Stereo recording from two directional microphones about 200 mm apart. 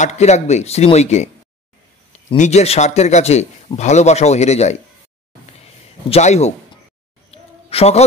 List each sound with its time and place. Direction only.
0.0 s a man's voice: 35° left (ahead or behind)
2.3 s a man's voice: 35° left (ahead or behind)
6.0 s a man's voice: 30° left (ahead or behind)
7.2 s a sound: 30° left (ahead or behind)